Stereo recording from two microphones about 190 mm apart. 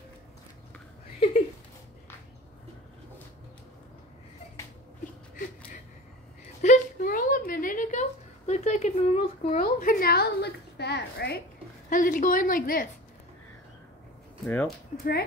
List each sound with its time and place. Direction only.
6.6 s a sound: 45° left (ahead or behind)
11.9 s a woman's voice: 45° left (ahead or behind)
14.4 s speech: 5° left (ahead or behind)
14.9 s speech: 40° left (ahead or behind)